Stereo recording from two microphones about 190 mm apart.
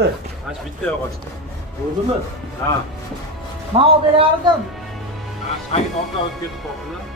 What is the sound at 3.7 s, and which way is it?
Speech, 30° right (ahead or behind).